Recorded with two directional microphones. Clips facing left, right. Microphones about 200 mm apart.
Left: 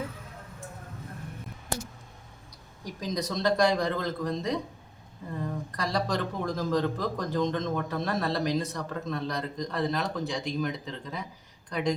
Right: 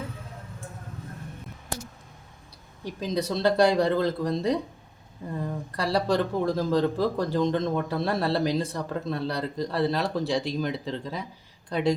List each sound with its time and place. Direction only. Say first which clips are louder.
2.8 s a man's voice: right 4 dB; 30° right (ahead or behind)
5.7 s a man's voice: right 6 dB; 30° right (ahead or behind)